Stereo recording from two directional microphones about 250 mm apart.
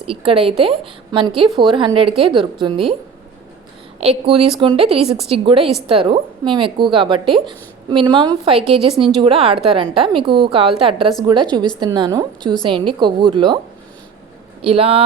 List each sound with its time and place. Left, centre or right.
0.0 s a woman's voice: right
4.0 s a woman's voice: right
14.6 s a woman's voice: right